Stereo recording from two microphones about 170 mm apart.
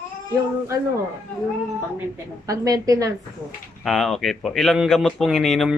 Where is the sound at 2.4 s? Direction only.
20° right (ahead or behind).